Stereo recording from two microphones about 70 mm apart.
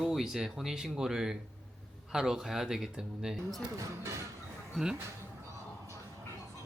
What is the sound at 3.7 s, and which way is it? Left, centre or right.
Speech, right.